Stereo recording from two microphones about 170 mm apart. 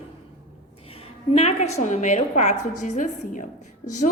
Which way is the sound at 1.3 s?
40° left (ahead or behind).